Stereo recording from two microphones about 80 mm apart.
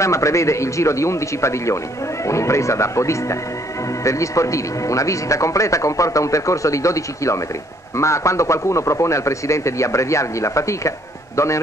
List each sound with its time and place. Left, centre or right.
0.0 s speech: left